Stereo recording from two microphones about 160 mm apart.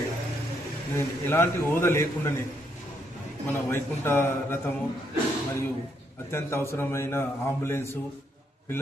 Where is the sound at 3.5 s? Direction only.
15° left (ahead or behind).